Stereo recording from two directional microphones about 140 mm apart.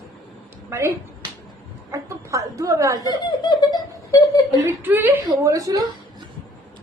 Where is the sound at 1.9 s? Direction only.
20° right (ahead or behind).